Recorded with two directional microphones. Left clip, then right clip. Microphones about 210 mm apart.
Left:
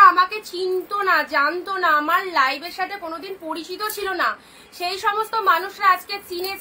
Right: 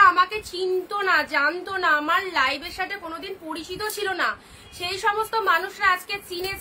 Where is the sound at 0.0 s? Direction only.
15° right (ahead or behind).